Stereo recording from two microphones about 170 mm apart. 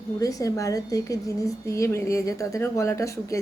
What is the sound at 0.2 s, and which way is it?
A woman's voice, 20° left (ahead or behind).